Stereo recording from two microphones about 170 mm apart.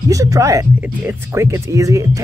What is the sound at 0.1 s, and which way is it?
Speech, 20° right (ahead or behind).